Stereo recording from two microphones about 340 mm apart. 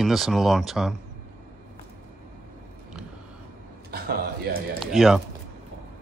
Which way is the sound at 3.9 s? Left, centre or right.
Right.